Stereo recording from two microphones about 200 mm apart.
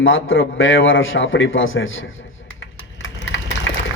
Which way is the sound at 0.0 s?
80° left.